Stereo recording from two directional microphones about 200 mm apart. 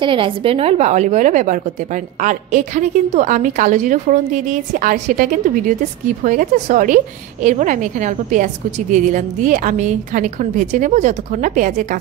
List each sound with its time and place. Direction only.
0.0 s a woman's voice: 25° right (ahead or behind)